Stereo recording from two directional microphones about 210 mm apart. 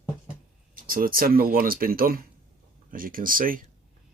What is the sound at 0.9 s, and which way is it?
Speech, 45° right (ahead or behind).